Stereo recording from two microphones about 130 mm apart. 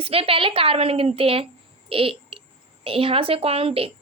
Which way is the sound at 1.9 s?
45° right (ahead or behind).